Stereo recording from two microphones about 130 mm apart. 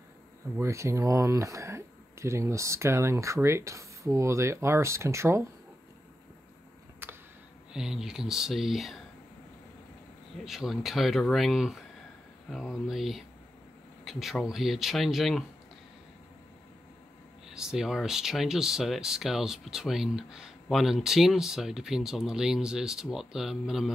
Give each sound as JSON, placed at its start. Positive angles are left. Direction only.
{"t": 0.6, "sound": "speech", "side_deg": -20}
{"t": 7.0, "sound": "a sound", "side_deg": -15}
{"t": 7.7, "sound": "speech", "side_deg": -5}
{"t": 10.4, "sound": "speech", "side_deg": 0}
{"t": 17.6, "sound": "speech", "side_deg": -5}